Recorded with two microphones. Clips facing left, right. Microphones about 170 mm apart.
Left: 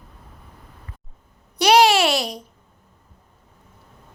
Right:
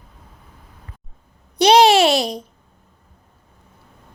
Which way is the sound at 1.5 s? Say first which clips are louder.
Right 3 dB; 20° right (ahead or behind).